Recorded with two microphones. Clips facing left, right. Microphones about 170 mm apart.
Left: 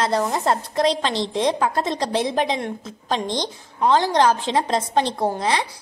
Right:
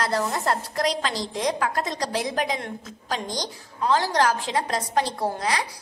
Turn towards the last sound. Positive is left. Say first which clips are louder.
# left 4 dB
turn(degrees=25)  # may be behind; listen again after turning